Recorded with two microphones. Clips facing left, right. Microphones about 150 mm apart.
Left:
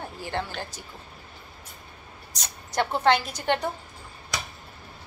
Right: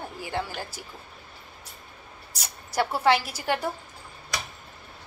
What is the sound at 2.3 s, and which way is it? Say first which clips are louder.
Speech: left 1 dB; 5° right (ahead or behind).